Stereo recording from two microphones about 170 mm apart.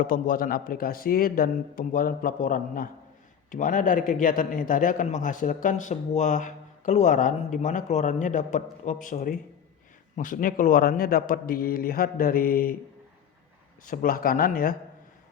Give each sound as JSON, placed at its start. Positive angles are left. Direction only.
{"t": 0.0, "sound": "a man's voice", "side_deg": 55}
{"t": 13.8, "sound": "speech", "side_deg": 55}